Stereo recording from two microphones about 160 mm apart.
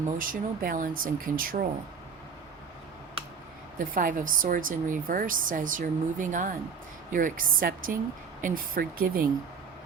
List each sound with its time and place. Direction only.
0.2 s a woman's voice: 60° right (ahead or behind)
3.8 s a woman's voice: 60° right (ahead or behind)